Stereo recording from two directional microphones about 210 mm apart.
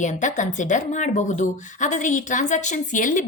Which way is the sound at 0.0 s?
35° left (ahead or behind).